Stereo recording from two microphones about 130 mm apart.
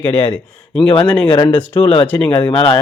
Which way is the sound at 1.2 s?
35° left (ahead or behind).